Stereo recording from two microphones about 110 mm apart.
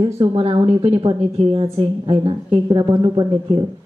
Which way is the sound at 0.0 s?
55° right (ahead or behind).